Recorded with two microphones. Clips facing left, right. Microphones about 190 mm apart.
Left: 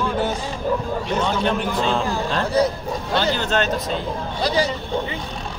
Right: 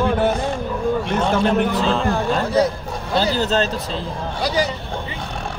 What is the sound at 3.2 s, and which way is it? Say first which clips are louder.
Speech: right 3 dB; 35° right (ahead or behind).